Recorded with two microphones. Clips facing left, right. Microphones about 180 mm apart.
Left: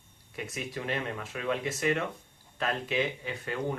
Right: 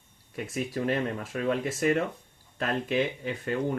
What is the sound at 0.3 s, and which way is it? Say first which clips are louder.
Speech: right 6 dB; 40° right (ahead or behind).